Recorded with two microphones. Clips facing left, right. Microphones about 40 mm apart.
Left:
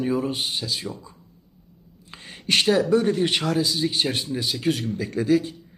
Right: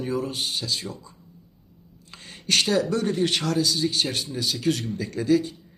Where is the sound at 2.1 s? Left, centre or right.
Centre.